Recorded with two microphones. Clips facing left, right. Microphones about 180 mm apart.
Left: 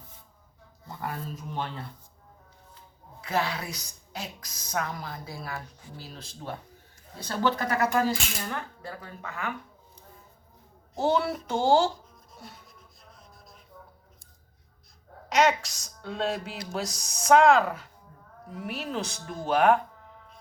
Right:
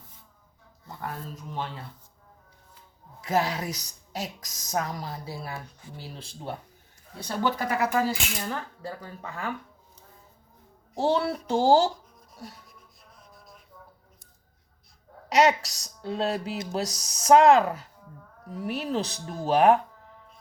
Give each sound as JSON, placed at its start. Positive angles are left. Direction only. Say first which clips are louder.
{"t": 0.9, "sound": "speech", "louder": "left 1 dB", "side_deg": 0}
{"t": 3.2, "sound": "a woman's voice", "louder": "right 3 dB", "side_deg": -45}
{"t": 7.3, "sound": "speech", "louder": "even", "side_deg": -10}
{"t": 8.8, "sound": "a woman's voice", "louder": "right 2 dB", "side_deg": -35}
{"t": 10.9, "sound": "a woman's voice", "louder": "right 1 dB", "side_deg": -30}
{"t": 15.3, "sound": "a woman's voice", "louder": "right 2 dB", "side_deg": -35}